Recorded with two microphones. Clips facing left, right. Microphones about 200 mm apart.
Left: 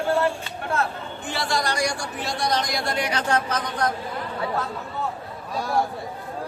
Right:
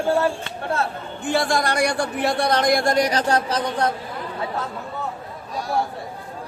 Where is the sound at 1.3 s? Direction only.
50° right (ahead or behind); by 3.9 s 30° right (ahead or behind).